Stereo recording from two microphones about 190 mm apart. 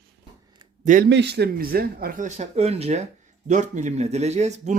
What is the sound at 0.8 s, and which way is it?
Speech, 40° right (ahead or behind).